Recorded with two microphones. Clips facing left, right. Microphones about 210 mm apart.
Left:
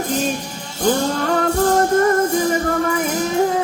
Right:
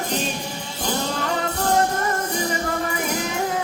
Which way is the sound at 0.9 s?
50° left (ahead or behind).